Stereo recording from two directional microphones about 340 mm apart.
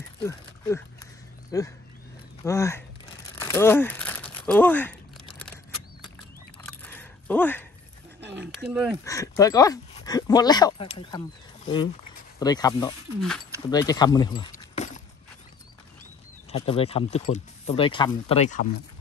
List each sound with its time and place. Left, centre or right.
0.2 s speech: centre
3.3 s a sound: centre
6.6 s a sound: centre
8.5 s speech: centre
9.0 s speech: centre
13.2 s speech: centre
13.7 s speech: centre
16.5 s speech: centre